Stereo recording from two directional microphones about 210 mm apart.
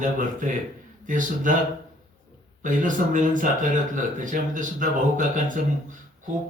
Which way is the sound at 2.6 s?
40° right (ahead or behind).